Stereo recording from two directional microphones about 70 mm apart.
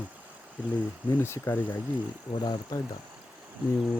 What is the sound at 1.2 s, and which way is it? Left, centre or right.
Speech, left.